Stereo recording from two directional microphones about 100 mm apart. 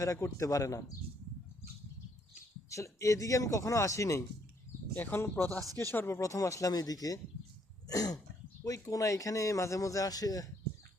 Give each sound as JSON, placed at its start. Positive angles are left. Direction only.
{"t": 0.0, "sound": "a man's voice", "side_deg": 35}
{"t": 2.6, "sound": "a man's voice", "side_deg": 30}
{"t": 4.9, "sound": "a man's voice", "side_deg": 20}